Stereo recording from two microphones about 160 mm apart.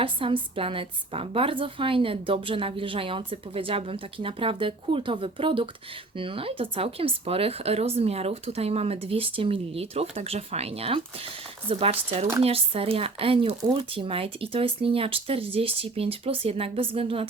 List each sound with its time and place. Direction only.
0.0 s a woman's voice: 35° right (ahead or behind)